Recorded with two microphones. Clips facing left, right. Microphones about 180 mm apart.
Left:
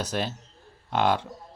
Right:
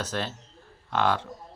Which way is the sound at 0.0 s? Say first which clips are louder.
Left 2 dB; 15° left (ahead or behind).